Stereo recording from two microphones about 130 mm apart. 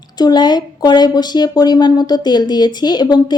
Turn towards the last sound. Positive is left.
turn(degrees=35)  # may be behind; listen again after turning